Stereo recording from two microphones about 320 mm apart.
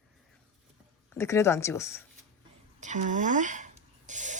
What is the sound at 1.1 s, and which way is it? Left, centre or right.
Speech, centre.